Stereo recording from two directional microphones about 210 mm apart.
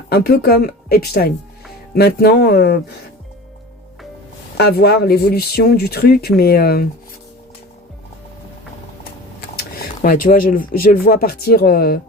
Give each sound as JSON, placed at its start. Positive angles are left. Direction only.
{"t": 0.1, "sound": "speech", "side_deg": 45}
{"t": 4.5, "sound": "speech", "side_deg": 50}
{"t": 9.6, "sound": "speech", "side_deg": 45}